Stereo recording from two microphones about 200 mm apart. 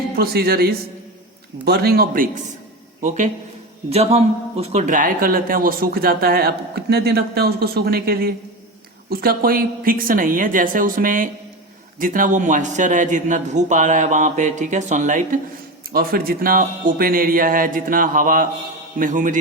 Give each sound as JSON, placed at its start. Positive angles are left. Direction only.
{"t": 0.2, "sound": "speech", "side_deg": -50}
{"t": 3.8, "sound": "a man's voice", "side_deg": -30}